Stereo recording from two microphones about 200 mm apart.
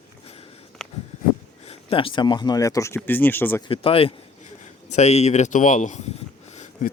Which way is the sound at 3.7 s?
30° left (ahead or behind).